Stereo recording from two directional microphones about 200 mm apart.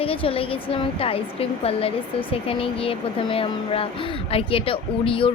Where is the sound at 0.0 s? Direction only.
30° left (ahead or behind).